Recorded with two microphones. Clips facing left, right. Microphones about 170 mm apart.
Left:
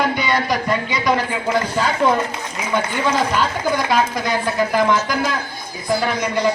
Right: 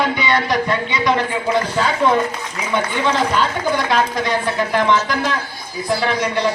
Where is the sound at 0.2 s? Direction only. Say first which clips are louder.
Right 2 dB; 5° left (ahead or behind).